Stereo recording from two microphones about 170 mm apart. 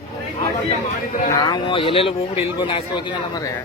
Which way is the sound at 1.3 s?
25° left (ahead or behind).